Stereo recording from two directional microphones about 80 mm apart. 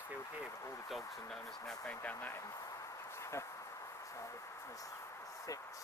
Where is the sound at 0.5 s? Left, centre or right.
Left.